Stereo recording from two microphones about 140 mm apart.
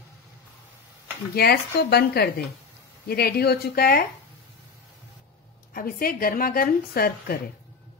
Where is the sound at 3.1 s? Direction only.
90° left.